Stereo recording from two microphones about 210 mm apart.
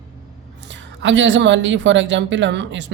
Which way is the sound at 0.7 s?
60° right (ahead or behind).